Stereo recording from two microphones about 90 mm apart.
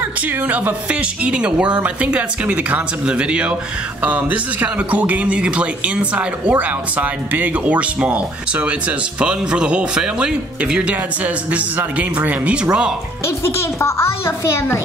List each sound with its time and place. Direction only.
0.5 s speech: 15° right (ahead or behind)
13.4 s a child's voice: 30° left (ahead or behind)